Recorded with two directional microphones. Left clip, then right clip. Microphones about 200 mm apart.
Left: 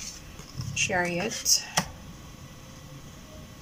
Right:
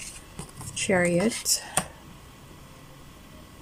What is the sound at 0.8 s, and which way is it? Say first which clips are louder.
Speech: right 3 dB; 25° right (ahead or behind).